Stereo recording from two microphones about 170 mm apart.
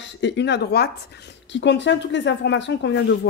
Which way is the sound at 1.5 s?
90° left.